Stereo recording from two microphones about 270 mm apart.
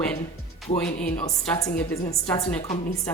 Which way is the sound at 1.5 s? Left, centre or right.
Centre.